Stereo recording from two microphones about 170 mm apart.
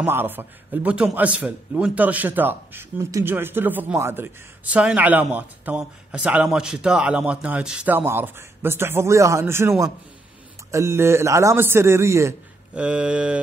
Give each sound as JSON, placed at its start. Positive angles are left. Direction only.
{"t": 0.0, "sound": "a man's voice", "side_deg": -10}